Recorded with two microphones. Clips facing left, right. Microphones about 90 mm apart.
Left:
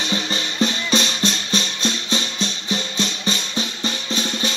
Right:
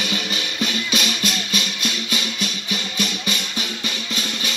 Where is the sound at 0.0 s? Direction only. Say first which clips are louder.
Left 2 dB; 30° left (ahead or behind).